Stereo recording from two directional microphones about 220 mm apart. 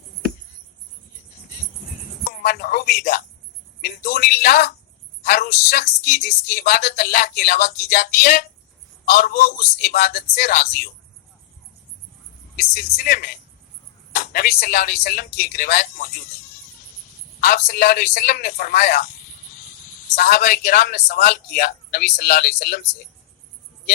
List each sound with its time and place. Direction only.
2.2 s a sound: 45° left (ahead or behind)
3.8 s a man's voice: 40° left (ahead or behind)
12.7 s a woman's voice: 45° left (ahead or behind)
17.4 s a woman's voice: 45° left (ahead or behind)
20.1 s a woman's voice: 45° left (ahead or behind)